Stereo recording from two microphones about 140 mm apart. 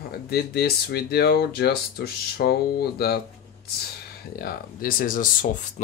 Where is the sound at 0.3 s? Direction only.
90° left.